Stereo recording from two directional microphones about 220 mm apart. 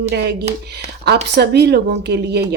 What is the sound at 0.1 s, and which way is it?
Speech, 50° right (ahead or behind).